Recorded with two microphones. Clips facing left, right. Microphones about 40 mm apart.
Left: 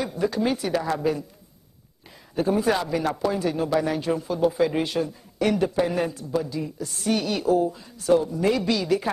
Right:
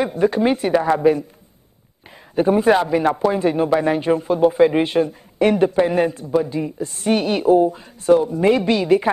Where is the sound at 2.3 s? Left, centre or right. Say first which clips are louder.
Right 7 dB; right.